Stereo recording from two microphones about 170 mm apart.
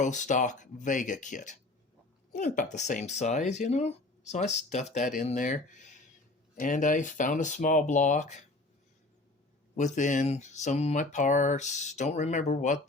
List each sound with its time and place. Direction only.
0.0 s speech: 45° left (ahead or behind)
9.7 s speech: 45° left (ahead or behind)